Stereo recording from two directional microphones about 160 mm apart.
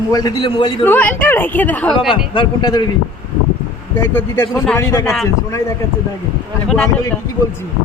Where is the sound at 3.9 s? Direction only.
25° left (ahead or behind).